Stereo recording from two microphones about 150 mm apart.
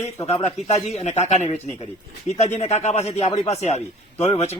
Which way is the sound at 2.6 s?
45° left (ahead or behind).